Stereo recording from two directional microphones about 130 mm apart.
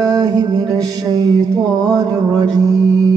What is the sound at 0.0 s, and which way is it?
Music, 30° right (ahead or behind).